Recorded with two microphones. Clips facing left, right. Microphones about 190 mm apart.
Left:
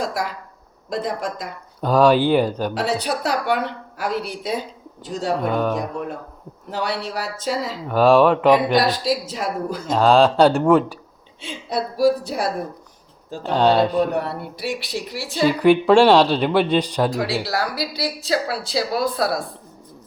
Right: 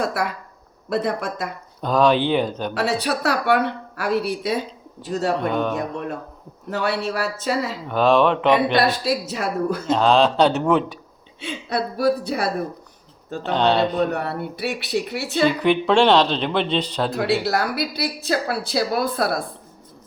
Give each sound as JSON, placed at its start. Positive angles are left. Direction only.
{"t": 0.0, "sound": "a woman's voice", "side_deg": -60}
{"t": 1.8, "sound": "speech", "side_deg": 10}
{"t": 2.7, "sound": "a woman's voice", "side_deg": -65}
{"t": 5.4, "sound": "speech", "side_deg": 5}
{"t": 6.7, "sound": "a woman's voice", "side_deg": -65}
{"t": 7.9, "sound": "speech", "side_deg": 10}
{"t": 9.4, "sound": "a woman's voice", "side_deg": -60}
{"t": 9.9, "sound": "speech", "side_deg": 5}
{"t": 11.3, "sound": "a woman's voice", "side_deg": -60}
{"t": 13.5, "sound": "speech", "side_deg": 10}
{"t": 14.1, "sound": "a woman's voice", "side_deg": -60}
{"t": 15.4, "sound": "speech", "side_deg": 10}
{"t": 17.1, "sound": "a woman's voice", "side_deg": -60}